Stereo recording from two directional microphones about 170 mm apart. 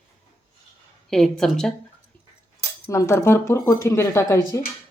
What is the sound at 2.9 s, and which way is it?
Speech, 15° left (ahead or behind).